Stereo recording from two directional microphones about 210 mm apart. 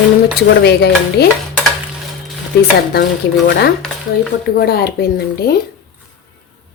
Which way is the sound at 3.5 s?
55° left (ahead or behind).